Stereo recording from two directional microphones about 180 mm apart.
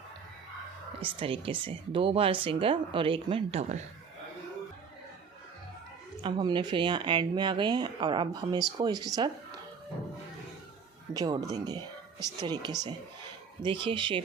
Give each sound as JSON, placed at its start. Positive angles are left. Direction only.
{"t": 1.2, "sound": "speech", "side_deg": -30}
{"t": 6.2, "sound": "speech", "side_deg": -25}
{"t": 11.1, "sound": "speech", "side_deg": -20}